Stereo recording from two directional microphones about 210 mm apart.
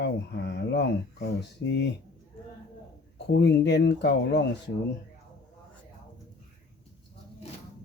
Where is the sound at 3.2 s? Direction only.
55° left (ahead or behind).